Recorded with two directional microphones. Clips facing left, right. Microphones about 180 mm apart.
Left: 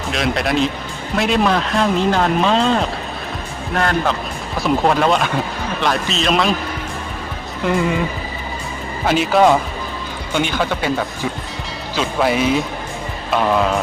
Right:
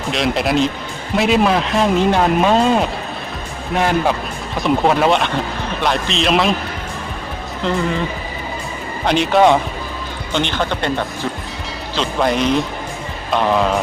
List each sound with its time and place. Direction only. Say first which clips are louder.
0.1 s speech: right 2 dB; centre (ahead or behind)
9.0 s speech: right 1 dB; 5° left (ahead or behind)